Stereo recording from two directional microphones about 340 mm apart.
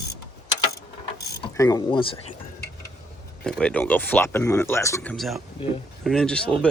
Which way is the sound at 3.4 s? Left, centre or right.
Centre.